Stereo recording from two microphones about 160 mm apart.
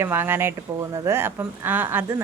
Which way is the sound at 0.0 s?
15° right (ahead or behind).